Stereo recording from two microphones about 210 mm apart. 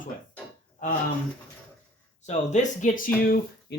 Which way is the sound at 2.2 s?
35° left (ahead or behind).